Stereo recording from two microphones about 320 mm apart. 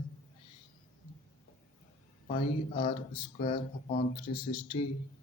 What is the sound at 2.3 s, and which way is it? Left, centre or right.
Speech, left.